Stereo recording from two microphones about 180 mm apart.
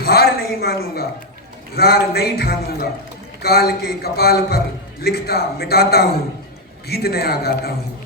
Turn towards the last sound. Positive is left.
turn(degrees=60)  # may be behind; listen again after turning